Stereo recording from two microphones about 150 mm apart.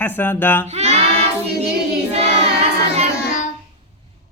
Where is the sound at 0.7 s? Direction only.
45° right (ahead or behind).